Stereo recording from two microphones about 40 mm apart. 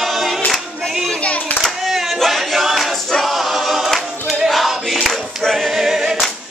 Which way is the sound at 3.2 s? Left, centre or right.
Centre.